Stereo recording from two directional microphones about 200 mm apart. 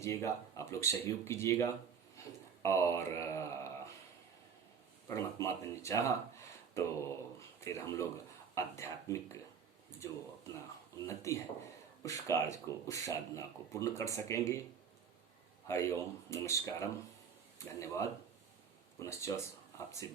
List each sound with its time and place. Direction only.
0.0 s speech: 15° left (ahead or behind)
2.2 s a sound: 15° left (ahead or behind)
2.6 s speech: 15° left (ahead or behind)
5.0 s speech: 15° left (ahead or behind)
15.6 s speech: 15° left (ahead or behind)